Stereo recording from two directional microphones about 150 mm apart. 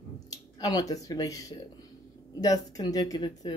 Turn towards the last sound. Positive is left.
turn(degrees=25)  # may be behind; listen again after turning